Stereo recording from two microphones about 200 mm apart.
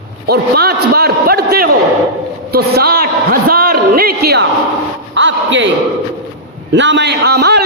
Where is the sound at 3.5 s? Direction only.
50° right (ahead or behind).